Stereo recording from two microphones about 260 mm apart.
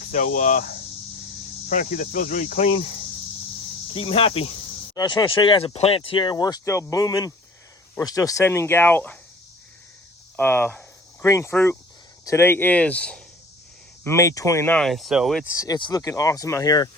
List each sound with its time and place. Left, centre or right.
0.0 s speech: left
1.7 s speech: left
3.9 s speech: left
10.3 s speech: centre
15.5 s speech: centre